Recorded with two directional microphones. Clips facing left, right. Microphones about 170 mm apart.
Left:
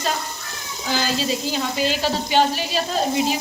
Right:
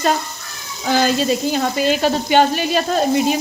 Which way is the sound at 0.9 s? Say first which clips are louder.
Right 7 dB; 55° right (ahead or behind).